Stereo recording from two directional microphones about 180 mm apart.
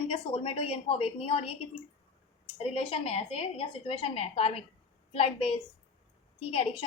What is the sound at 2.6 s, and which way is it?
A woman's voice, 30° left (ahead or behind).